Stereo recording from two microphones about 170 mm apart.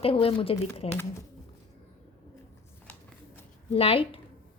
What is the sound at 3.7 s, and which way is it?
Speech, 35° left (ahead or behind).